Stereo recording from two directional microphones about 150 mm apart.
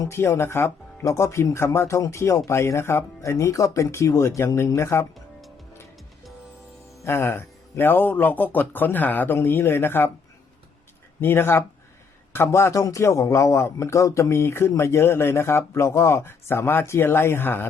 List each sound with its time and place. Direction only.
0.0 s speech: 15° left (ahead or behind)
7.0 s a man's voice: 15° left (ahead or behind)
11.2 s a man's voice: 15° left (ahead or behind)